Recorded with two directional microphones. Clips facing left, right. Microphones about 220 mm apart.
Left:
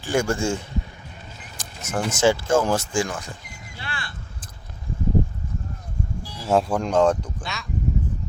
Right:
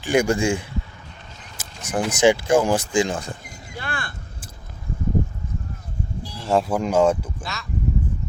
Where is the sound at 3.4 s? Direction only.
50° right (ahead or behind).